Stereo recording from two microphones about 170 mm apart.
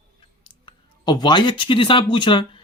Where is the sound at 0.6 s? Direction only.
25° left (ahead or behind).